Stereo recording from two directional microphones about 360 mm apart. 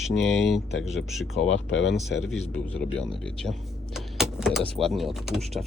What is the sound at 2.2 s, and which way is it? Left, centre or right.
Speech, centre.